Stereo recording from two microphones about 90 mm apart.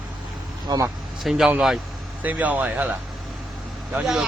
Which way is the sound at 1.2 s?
5° right (ahead or behind).